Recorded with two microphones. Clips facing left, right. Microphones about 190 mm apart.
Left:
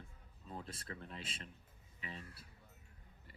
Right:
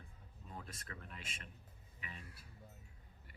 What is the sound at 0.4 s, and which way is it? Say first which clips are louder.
Speech: left 4 dB; 30° left (ahead or behind).